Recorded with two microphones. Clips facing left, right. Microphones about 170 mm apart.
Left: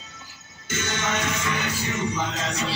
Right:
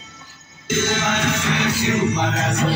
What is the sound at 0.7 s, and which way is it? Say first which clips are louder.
Music: right 7 dB; 90° right.